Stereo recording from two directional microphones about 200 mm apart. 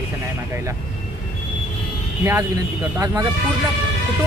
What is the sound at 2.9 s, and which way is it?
Speech, 15° right (ahead or behind).